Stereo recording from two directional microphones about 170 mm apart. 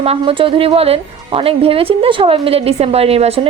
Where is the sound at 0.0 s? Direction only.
35° right (ahead or behind).